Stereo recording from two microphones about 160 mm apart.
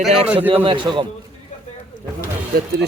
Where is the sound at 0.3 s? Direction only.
35° right (ahead or behind).